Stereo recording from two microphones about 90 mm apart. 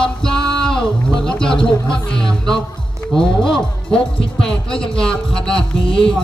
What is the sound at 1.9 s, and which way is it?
Speech, 10° left (ahead or behind).